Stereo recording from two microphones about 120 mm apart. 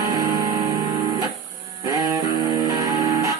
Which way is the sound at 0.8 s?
40° right (ahead or behind).